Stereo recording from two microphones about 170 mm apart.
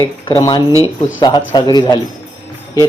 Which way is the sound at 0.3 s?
25° left (ahead or behind).